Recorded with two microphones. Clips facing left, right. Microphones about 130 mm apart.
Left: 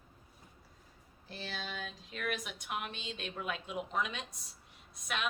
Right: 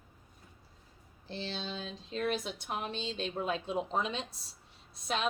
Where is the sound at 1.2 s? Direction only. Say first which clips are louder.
Right 4 dB; 30° right (ahead or behind).